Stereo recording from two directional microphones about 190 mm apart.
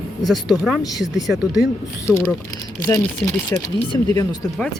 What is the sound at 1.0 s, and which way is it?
Speech, centre (ahead or behind).